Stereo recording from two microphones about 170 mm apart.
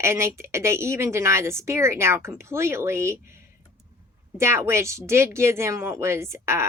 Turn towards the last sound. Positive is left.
turn(degrees=-15)  # may be behind; listen again after turning